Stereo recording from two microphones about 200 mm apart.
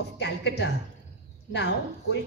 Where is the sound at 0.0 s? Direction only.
60° left (ahead or behind).